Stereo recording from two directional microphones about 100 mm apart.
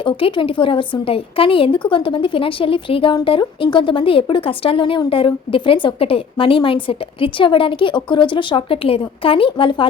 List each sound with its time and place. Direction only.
0.0 s speech: 60° left (ahead or behind)